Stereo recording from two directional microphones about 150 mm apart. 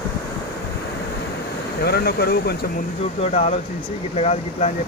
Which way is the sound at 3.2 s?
45° left (ahead or behind).